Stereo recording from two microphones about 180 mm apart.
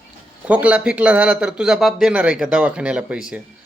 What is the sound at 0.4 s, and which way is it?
Speech, 10° right (ahead or behind).